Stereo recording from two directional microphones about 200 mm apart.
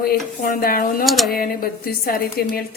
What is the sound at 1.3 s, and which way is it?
Speech, 50° left (ahead or behind).